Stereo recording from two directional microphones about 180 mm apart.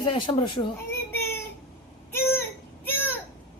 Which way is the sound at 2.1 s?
15° left (ahead or behind).